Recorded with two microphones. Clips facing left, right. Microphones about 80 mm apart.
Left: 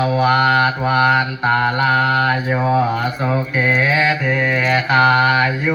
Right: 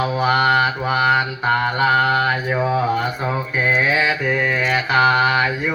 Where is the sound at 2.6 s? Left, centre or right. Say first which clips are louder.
Left 4 dB; left.